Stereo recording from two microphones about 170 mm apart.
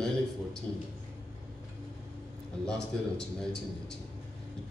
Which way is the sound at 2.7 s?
5° left (ahead or behind).